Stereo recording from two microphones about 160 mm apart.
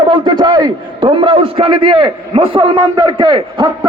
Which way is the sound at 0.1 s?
30° right (ahead or behind).